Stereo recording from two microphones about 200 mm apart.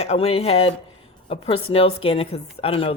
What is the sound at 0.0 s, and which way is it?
A woman's voice, 30° left (ahead or behind).